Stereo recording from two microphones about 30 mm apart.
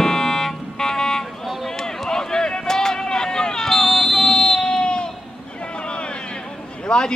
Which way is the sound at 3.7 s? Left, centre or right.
Centre.